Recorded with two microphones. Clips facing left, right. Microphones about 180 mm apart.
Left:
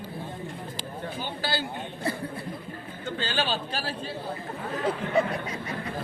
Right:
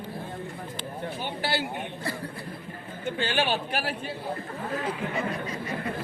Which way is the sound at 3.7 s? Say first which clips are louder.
Right 3 dB; 25° left (ahead or behind).